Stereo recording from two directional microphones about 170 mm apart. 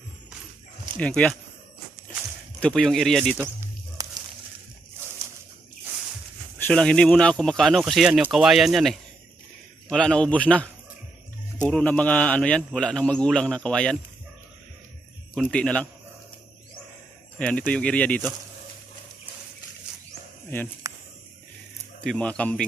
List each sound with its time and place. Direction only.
0.9 s speech: 5° left (ahead or behind)
2.6 s speech: centre (ahead or behind)
4.0 s a sound: 20° right (ahead or behind)
6.6 s speech: 5° left (ahead or behind)
15.3 s speech: 5° left (ahead or behind)
17.4 s speech: 5° left (ahead or behind)
20.5 s speech: 10° left (ahead or behind)
22.0 s speech: 5° left (ahead or behind)